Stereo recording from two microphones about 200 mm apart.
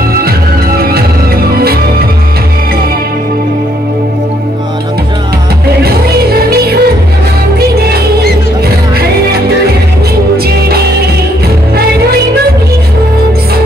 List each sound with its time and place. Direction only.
0.7 s music: 50° right (ahead or behind)
5.8 s music: 50° right (ahead or behind)